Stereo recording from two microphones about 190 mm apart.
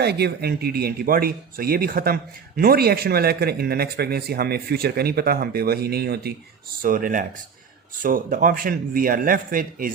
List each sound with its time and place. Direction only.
0.0 s speech: 60° right (ahead or behind)